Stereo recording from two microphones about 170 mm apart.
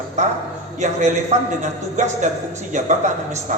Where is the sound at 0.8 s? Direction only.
45° right (ahead or behind).